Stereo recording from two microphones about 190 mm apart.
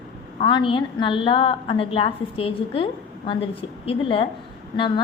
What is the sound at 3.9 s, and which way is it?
Speech, 30° left (ahead or behind).